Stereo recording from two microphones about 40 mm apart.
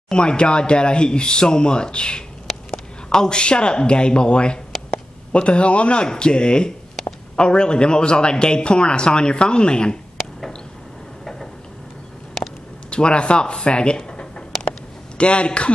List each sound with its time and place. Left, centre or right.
0.1 s a man's voice: left
12.9 s a man's voice: left